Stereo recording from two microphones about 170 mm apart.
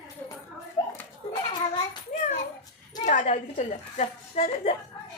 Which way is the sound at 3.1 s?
50° left (ahead or behind).